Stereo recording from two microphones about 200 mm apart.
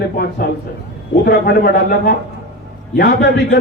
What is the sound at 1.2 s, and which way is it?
A man's voice, 55° left (ahead or behind).